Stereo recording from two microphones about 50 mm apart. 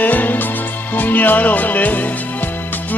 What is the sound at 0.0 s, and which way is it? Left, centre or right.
Music, left.